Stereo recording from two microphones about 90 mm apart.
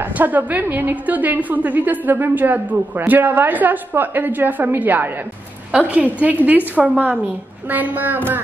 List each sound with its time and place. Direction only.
0.2 s a woman's voice: 20° right (ahead or behind)